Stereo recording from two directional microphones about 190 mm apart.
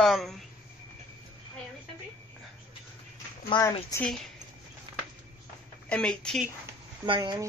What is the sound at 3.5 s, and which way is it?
Speech, 20° left (ahead or behind).